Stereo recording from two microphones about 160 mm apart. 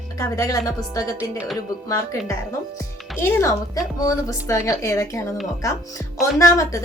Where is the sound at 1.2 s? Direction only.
5° right (ahead or behind).